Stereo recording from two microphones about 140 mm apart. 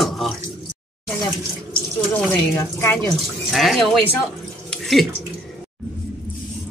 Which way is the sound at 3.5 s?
Centre (ahead or behind).